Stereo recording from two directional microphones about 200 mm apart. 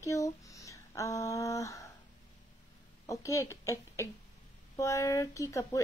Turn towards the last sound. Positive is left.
turn(degrees=15)  # may be behind; listen again after turning